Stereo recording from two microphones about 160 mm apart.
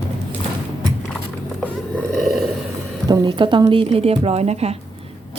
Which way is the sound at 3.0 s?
25° right (ahead or behind).